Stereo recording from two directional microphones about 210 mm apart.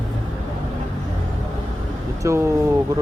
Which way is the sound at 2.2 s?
15° right (ahead or behind).